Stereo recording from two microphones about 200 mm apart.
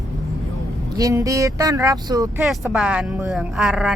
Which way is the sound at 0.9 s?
15° right (ahead or behind).